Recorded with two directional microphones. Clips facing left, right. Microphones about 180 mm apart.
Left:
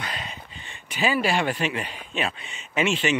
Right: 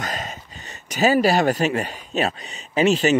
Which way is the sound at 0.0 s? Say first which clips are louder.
Right 5 dB; 45° right (ahead or behind).